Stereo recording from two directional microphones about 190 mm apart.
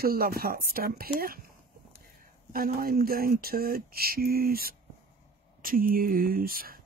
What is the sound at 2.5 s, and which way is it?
Speech, 50° right (ahead or behind).